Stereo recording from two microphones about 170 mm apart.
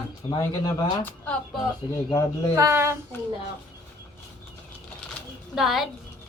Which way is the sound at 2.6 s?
15° right (ahead or behind).